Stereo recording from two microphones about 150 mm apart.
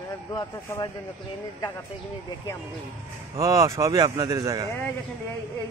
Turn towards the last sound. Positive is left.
turn(degrees=15)  # may be behind; listen again after turning